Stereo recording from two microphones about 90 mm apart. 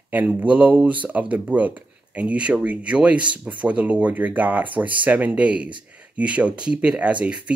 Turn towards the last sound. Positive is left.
turn(degrees=-15)  # may be behind; listen again after turning